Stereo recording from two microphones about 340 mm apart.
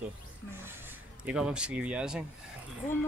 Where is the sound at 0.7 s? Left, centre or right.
Centre.